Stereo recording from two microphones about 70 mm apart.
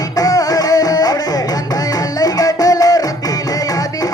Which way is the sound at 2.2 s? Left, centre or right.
Left.